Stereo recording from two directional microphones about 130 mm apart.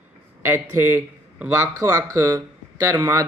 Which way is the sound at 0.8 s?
15° right (ahead or behind).